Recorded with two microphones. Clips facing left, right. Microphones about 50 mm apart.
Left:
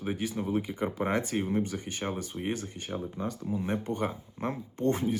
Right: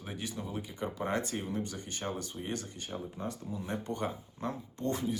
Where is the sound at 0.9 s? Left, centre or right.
Left.